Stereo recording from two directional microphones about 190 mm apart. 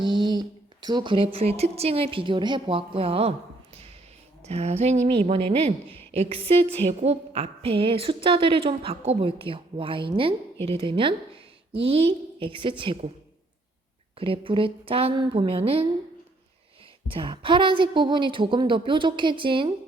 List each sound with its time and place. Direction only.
0.0 s speech: 25° right (ahead or behind)
4.4 s a woman's voice: 35° right (ahead or behind)
14.2 s a woman's voice: 25° right (ahead or behind)
17.1 s a woman's voice: 25° right (ahead or behind)